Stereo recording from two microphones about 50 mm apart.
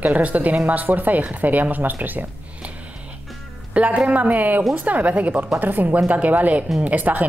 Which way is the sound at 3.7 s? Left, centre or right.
Right.